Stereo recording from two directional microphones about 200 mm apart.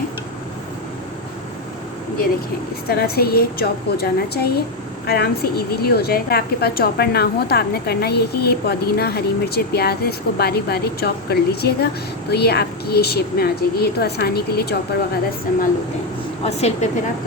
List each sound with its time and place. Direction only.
2.9 s a woman's voice: 50° left (ahead or behind)
16.4 s a woman's voice: 30° left (ahead or behind)